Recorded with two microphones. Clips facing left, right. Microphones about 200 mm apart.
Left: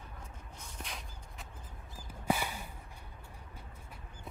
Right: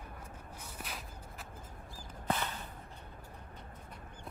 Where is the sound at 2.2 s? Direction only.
10° left (ahead or behind).